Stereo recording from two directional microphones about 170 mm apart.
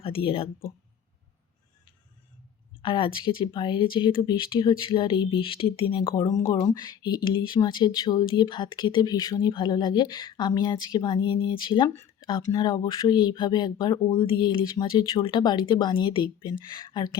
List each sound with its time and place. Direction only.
0.0 s speech: 35° left (ahead or behind)
2.8 s speech: 30° left (ahead or behind)